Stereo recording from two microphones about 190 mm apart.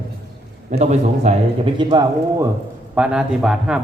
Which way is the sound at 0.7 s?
40° right (ahead or behind).